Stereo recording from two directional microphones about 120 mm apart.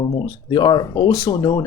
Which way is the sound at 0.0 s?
35° left (ahead or behind).